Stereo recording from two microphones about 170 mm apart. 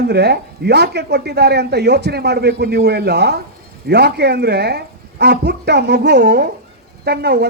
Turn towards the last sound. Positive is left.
turn(degrees=-70)  # may be behind; listen again after turning